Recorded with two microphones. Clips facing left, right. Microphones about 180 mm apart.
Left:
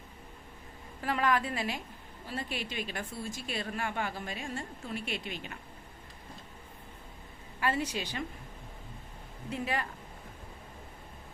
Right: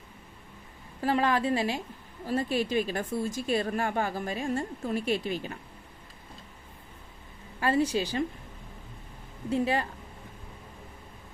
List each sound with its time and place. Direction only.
1.0 s a woman's voice: 30° right (ahead or behind)
2.2 s a woman's voice: 40° right (ahead or behind)
7.6 s a woman's voice: 35° right (ahead or behind)
9.5 s a woman's voice: 30° right (ahead or behind)